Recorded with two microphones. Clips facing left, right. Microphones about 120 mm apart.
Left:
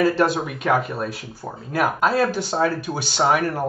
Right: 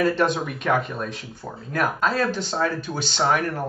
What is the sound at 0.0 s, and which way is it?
Speech, 5° left (ahead or behind).